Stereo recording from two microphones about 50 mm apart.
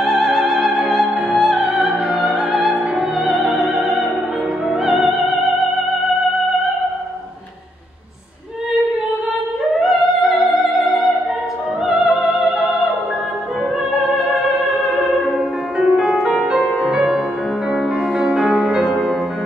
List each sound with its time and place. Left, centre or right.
0.0 s opera: centre
0.8 s music: centre
3.2 s opera: centre
4.6 s music: centre
9.8 s music: centre
14.3 s music: centre
18.1 s music: centre
18.5 s music: right
18.8 s music: centre